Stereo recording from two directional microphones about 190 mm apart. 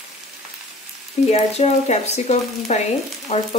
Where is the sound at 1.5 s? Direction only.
35° left (ahead or behind).